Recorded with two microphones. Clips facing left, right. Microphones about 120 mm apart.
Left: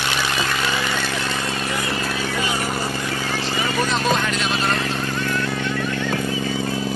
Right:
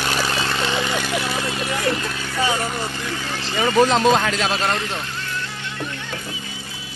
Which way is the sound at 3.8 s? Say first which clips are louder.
Right 4 dB; 90° right.